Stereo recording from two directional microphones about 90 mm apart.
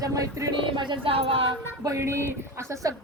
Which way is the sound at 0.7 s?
60° right (ahead or behind).